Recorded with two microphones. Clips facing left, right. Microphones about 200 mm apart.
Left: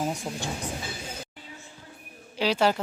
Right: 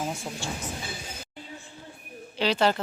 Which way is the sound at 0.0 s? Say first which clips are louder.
Left 2 dB; 15° left (ahead or behind).